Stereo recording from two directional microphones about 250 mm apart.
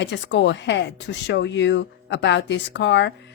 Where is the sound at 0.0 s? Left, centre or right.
Left.